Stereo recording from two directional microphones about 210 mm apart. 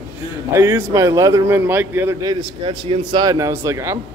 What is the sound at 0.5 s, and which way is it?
A man's voice, 15° right (ahead or behind).